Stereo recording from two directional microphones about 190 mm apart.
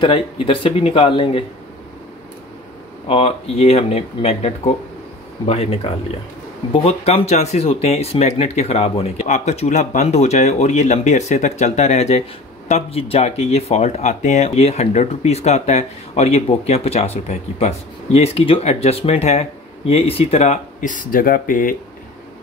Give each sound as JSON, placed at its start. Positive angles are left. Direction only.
{"t": 0.0, "sound": "speech", "side_deg": 25}
{"t": 3.1, "sound": "speech", "side_deg": 30}